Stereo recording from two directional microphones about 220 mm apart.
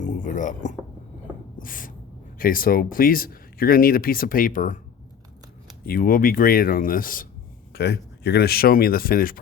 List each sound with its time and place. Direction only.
0.0 s a sound: 35° left (ahead or behind)
1.5 s gasp: 40° left (ahead or behind)
2.4 s speech: 40° left (ahead or behind)
5.8 s speech: 40° left (ahead or behind)